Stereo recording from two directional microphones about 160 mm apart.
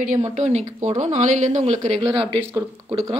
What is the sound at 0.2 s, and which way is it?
Speech, 45° right (ahead or behind).